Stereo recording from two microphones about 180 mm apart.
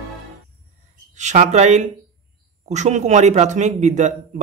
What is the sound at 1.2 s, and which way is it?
A man's voice, 40° right (ahead or behind).